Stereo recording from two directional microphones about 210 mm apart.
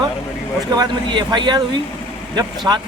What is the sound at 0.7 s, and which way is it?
Speech, 20° right (ahead or behind).